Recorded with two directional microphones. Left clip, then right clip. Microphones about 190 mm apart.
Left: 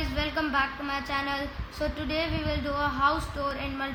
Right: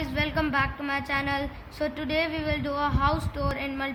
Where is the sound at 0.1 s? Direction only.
15° right (ahead or behind).